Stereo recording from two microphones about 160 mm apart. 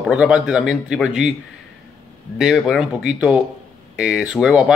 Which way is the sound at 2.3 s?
5° right (ahead or behind).